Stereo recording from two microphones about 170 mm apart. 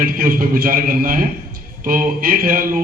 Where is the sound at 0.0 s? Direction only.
55° right (ahead or behind).